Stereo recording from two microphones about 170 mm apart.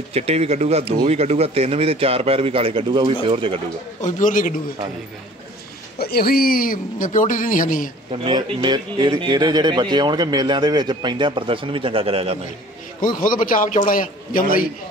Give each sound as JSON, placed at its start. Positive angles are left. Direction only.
{"t": 0.1, "sound": "speech", "side_deg": -35}
{"t": 4.0, "sound": "speech", "side_deg": 50}
{"t": 5.9, "sound": "speech", "side_deg": 65}
{"t": 8.1, "sound": "speech", "side_deg": -30}
{"t": 13.0, "sound": "speech", "side_deg": 55}